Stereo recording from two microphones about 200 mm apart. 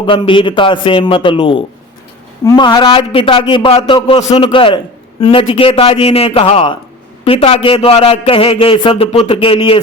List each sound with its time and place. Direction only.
0.0 s a man's voice: 25° left (ahead or behind)